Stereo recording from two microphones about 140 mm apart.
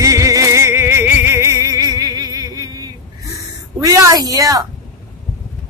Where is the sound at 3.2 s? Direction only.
25° right (ahead or behind).